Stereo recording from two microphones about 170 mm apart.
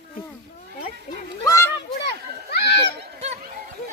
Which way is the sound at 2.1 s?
75° left (ahead or behind).